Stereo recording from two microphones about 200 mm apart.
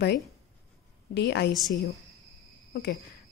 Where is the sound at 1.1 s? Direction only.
55° left (ahead or behind).